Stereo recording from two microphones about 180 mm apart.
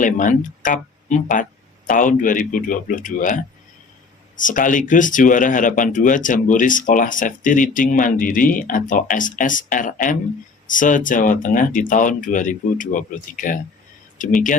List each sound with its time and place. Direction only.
0.0 s speech: 45° left (ahead or behind)